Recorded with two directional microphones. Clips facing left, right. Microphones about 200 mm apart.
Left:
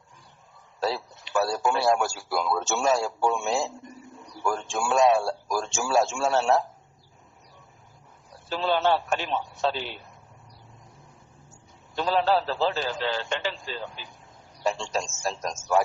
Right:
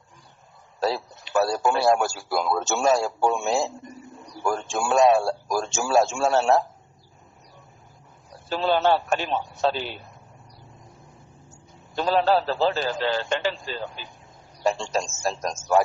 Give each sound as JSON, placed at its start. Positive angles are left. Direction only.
{"t": 0.8, "sound": "a sound", "side_deg": -45}
{"t": 2.3, "sound": "a man's voice", "side_deg": -45}
{"t": 8.4, "sound": "a man's voice", "side_deg": -40}
{"t": 11.9, "sound": "a man's voice", "side_deg": -45}